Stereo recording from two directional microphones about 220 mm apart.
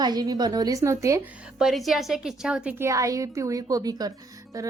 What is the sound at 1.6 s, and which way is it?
Speech, centre (ahead or behind).